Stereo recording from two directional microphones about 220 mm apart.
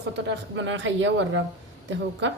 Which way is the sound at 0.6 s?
55° right (ahead or behind).